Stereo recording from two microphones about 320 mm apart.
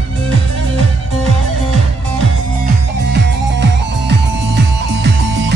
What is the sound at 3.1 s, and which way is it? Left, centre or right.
Music, right.